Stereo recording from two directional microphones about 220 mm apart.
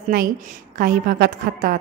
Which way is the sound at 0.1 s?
40° right (ahead or behind).